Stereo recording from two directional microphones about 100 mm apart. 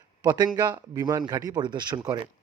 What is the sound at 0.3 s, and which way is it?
Speech, 45° right (ahead or behind).